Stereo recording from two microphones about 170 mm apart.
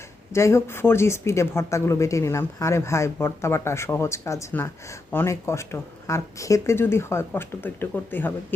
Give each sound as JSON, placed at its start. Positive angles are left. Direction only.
{"t": 0.3, "sound": "speech", "side_deg": 15}